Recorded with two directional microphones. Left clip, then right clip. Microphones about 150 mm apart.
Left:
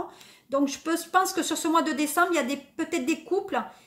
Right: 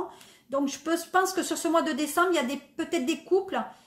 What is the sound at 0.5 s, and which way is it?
Speech, 30° left (ahead or behind).